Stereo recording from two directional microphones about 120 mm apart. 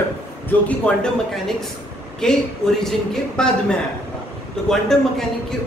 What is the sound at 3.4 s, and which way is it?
Speech, 5° left (ahead or behind).